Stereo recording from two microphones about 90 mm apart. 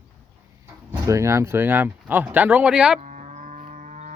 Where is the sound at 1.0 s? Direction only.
35° right (ahead or behind); by 3.0 s 10° right (ahead or behind).